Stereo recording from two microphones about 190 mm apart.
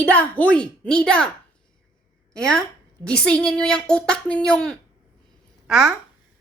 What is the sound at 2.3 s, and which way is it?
A woman's voice, 5° left (ahead or behind).